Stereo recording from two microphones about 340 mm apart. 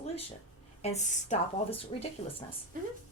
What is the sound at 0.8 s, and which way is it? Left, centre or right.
Speech, centre.